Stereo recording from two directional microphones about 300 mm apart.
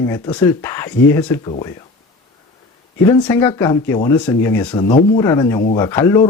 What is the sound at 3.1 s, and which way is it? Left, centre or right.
Speech, centre.